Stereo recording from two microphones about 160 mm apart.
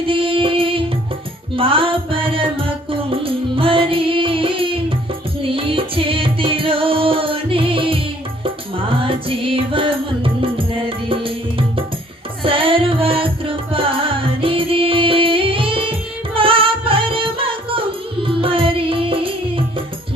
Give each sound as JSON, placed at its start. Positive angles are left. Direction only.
{"t": 0.1, "sound": "music", "side_deg": -35}
{"t": 12.4, "sound": "music", "side_deg": -35}